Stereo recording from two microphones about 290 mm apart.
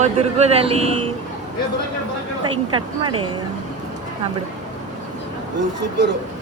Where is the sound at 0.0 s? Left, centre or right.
Right.